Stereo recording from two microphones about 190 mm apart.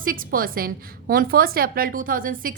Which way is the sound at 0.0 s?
50° right (ahead or behind).